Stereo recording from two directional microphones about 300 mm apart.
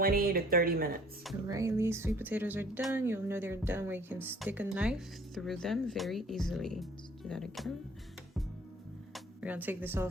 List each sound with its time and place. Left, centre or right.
0.0 s speech: right
1.5 s speech: centre
9.1 s speech: centre